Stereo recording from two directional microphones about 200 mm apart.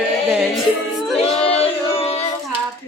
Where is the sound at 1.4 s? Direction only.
30° left (ahead or behind).